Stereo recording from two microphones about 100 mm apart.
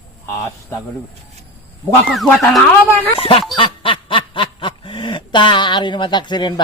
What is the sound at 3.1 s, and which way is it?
Speech, 65° left (ahead or behind).